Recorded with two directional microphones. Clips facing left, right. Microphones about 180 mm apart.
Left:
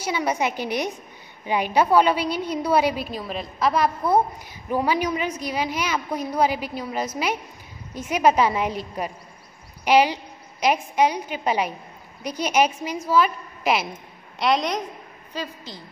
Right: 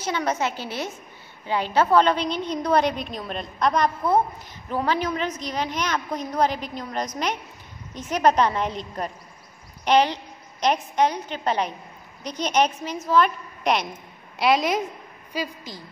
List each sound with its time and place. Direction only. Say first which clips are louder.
0.0 s a woman's voice: left 1 dB; 10° left (ahead or behind); by 15.8 s 10° right (ahead or behind)